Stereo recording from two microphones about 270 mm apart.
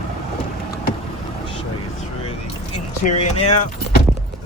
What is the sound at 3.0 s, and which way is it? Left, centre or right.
Speech, left.